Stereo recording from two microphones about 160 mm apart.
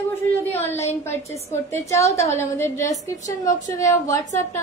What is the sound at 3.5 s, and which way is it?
Speech, 20° left (ahead or behind).